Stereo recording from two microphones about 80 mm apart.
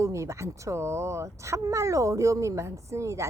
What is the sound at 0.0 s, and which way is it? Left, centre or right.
A woman's voice, right.